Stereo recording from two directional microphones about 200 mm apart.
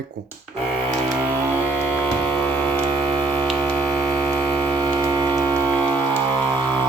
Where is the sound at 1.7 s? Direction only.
10° left (ahead or behind).